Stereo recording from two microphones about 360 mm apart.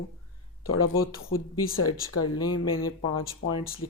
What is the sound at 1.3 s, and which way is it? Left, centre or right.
Speech, left.